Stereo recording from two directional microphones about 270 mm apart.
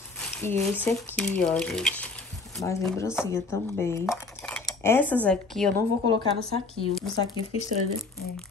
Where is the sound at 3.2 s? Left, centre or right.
Centre.